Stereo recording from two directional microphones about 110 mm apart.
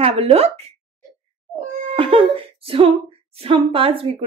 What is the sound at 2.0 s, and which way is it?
Speech, 55° right (ahead or behind).